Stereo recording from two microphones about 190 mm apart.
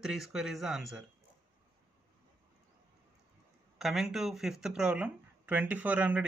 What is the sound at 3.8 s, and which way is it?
Speech, centre (ahead or behind).